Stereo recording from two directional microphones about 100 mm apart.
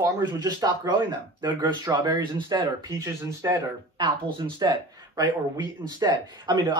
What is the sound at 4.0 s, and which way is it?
Speech, 55° right (ahead or behind).